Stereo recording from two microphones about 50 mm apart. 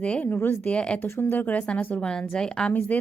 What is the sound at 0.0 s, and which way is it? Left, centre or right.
Speech, left.